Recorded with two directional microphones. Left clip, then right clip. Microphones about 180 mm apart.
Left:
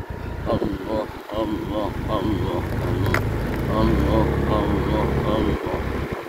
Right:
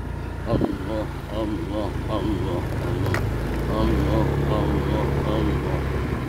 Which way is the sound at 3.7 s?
20° left (ahead or behind).